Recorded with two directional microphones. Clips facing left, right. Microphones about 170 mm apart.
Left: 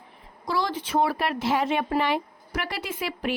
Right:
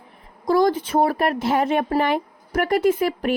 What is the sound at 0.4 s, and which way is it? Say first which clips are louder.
A woman's voice: right 10 dB; 45° right (ahead or behind).